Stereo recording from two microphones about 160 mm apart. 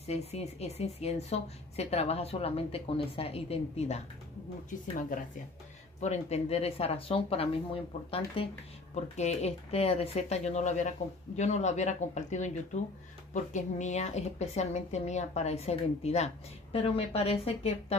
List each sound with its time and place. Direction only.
0.0 s a woman's voice: 40° left (ahead or behind)
4.6 s speech: 55° left (ahead or behind)
5.9 s a woman's voice: 45° left (ahead or behind)